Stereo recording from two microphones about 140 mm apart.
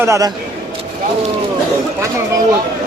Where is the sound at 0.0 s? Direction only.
20° right (ahead or behind).